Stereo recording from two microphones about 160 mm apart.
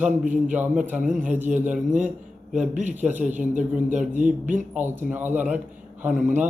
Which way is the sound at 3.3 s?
50° right (ahead or behind).